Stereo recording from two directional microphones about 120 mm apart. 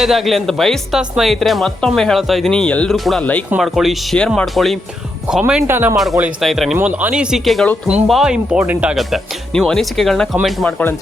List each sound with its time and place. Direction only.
0.0 s speech: centre (ahead or behind)
5.6 s speech: 20° right (ahead or behind)
6.4 s speech: centre (ahead or behind)